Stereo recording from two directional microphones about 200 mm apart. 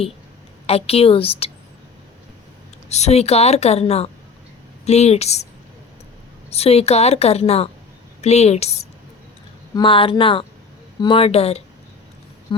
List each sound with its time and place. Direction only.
0.7 s a woman's voice: 30° left (ahead or behind)
2.9 s a woman's voice: 35° left (ahead or behind)
6.5 s a woman's voice: 30° left (ahead or behind)